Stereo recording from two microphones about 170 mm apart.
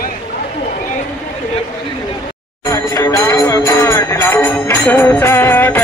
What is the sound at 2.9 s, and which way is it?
Music, 20° left (ahead or behind).